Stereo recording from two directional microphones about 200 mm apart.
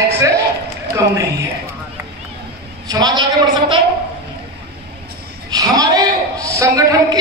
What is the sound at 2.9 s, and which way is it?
Speech, 20° right (ahead or behind).